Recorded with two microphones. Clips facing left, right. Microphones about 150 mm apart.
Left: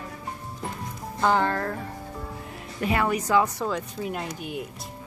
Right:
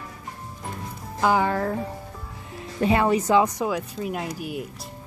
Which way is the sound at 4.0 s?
Centre (ahead or behind).